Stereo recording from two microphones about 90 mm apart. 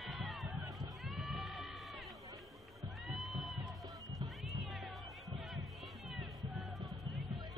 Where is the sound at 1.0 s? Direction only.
Centre (ahead or behind).